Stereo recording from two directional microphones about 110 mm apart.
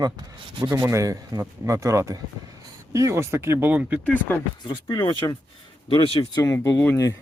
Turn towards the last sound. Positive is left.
turn(degrees=20)  # may be behind; listen again after turning